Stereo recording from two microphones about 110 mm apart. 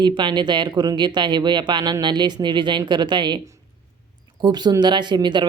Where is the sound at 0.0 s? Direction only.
45° right (ahead or behind).